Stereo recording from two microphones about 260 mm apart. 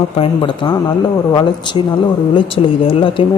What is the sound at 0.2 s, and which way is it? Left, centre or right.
A man's voice, centre.